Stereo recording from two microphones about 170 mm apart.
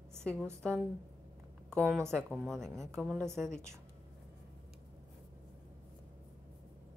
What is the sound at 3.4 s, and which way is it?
Speech, 5° left (ahead or behind).